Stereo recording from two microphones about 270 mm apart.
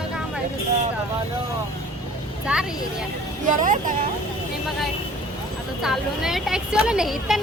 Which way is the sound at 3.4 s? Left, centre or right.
Right.